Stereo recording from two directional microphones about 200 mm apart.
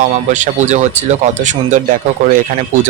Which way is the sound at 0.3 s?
35° right (ahead or behind).